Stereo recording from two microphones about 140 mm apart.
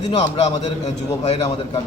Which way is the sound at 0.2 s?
45° left (ahead or behind).